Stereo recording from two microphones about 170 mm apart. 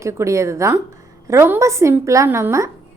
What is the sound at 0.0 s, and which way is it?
A woman's voice, 15° right (ahead or behind).